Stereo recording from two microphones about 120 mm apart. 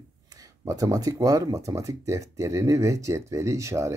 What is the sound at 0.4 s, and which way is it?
Speech, 30° right (ahead or behind).